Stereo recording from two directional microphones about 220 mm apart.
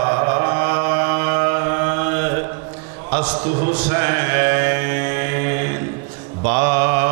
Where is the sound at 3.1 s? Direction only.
10° right (ahead or behind).